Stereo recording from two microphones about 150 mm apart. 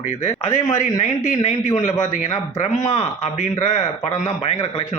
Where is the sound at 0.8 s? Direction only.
55° left (ahead or behind).